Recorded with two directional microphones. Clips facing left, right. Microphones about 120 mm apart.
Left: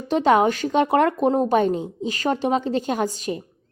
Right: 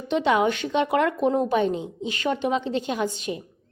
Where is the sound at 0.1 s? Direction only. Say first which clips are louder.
Left 4 dB; 40° left (ahead or behind).